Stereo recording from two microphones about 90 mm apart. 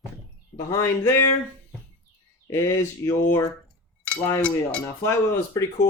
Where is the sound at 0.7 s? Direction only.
30° left (ahead or behind).